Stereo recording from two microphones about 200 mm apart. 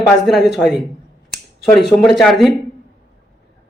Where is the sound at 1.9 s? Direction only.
Centre (ahead or behind).